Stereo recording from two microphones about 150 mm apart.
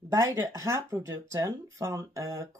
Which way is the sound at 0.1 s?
20° right (ahead or behind).